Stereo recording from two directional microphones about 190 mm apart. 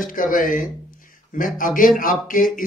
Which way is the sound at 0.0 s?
45° left (ahead or behind).